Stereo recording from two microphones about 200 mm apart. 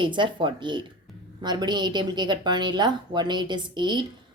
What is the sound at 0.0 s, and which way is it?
Speech, 25° right (ahead or behind).